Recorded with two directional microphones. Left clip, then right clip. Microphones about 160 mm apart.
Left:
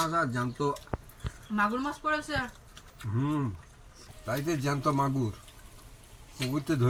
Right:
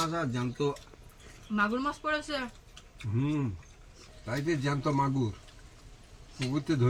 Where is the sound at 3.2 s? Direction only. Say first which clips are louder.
Left 1 dB; 20° right (ahead or behind).